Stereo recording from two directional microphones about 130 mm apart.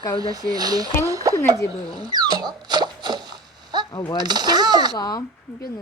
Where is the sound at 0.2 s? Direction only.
30° right (ahead or behind).